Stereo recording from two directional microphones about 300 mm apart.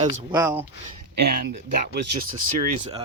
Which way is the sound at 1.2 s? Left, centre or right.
Right.